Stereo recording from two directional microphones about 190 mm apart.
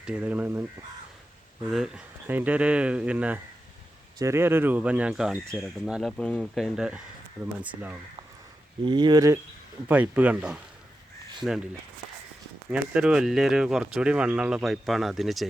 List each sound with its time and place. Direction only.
0.0 s speech: 5° right (ahead or behind)
1.7 s speech: 5° right (ahead or behind)
8.8 s speech: 25° right (ahead or behind)
9.9 s speech: 10° right (ahead or behind)
12.7 s speech: 5° right (ahead or behind)